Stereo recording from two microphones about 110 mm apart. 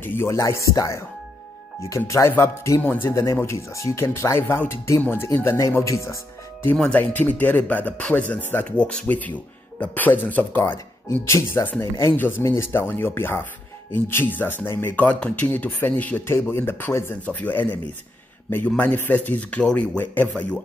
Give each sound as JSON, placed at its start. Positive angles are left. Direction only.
{"t": 0.0, "sound": "speech", "side_deg": 20}
{"t": 6.8, "sound": "speech", "side_deg": 10}
{"t": 18.8, "sound": "speech", "side_deg": 15}